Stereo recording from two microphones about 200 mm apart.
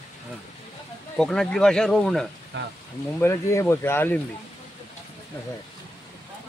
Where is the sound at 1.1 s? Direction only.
5° left (ahead or behind).